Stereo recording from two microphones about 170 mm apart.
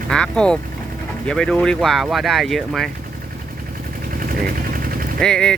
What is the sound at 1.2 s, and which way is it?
Speech, 5° left (ahead or behind).